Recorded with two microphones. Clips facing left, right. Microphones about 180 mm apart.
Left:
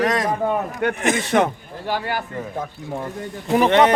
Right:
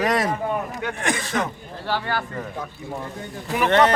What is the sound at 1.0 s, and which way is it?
Speech, 25° left (ahead or behind).